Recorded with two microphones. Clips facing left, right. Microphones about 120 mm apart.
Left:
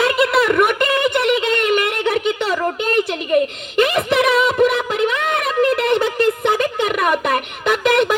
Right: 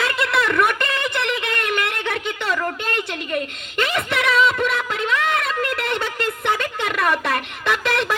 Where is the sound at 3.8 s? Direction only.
25° left (ahead or behind).